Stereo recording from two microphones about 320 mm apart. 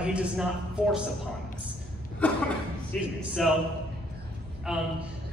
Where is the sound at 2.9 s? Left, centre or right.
Centre.